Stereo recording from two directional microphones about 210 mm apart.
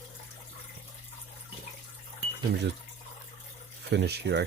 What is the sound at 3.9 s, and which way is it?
Speech, 55° right (ahead or behind).